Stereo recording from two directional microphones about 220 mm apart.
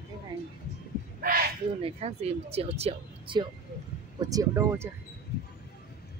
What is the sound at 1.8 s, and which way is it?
Speech, 30° right (ahead or behind).